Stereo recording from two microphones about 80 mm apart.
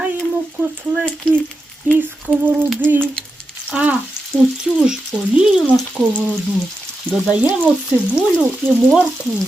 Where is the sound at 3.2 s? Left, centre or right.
Centre.